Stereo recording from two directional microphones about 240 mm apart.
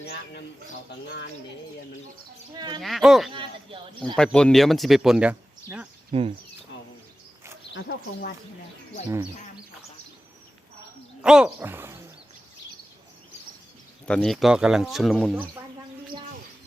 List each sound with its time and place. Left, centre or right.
0.0 s speech: left
2.5 s speech: centre
2.8 s speech: centre
6.1 s speech: right
7.7 s speech: left
11.2 s a sound: centre
14.1 s speech: centre